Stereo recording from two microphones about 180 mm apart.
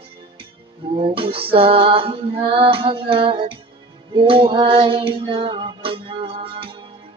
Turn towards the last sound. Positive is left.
turn(degrees=-30)  # may be behind; listen again after turning